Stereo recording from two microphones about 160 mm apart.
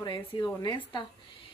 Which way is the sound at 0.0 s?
30° left (ahead or behind).